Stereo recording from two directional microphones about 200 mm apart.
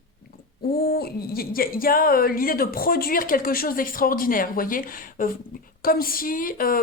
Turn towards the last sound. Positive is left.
turn(degrees=45)  # may be behind; listen again after turning